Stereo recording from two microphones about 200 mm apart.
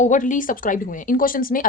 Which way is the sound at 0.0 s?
40° left (ahead or behind).